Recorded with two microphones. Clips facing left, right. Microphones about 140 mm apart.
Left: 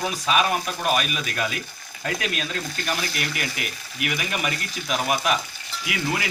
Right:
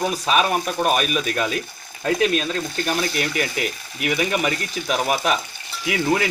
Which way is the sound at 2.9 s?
30° right (ahead or behind).